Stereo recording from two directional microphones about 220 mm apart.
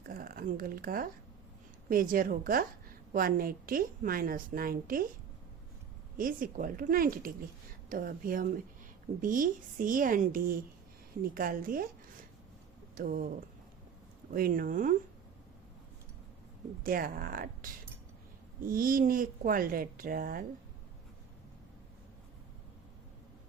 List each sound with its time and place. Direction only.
0.0 s a sound: 40° right (ahead or behind)
1.9 s a woman's voice: 40° right (ahead or behind)
6.1 s a woman's voice: 40° right (ahead or behind)
13.0 s a woman's voice: 40° right (ahead or behind)
14.3 s a woman's voice: 40° right (ahead or behind)
16.8 s a woman's voice: 40° right (ahead or behind)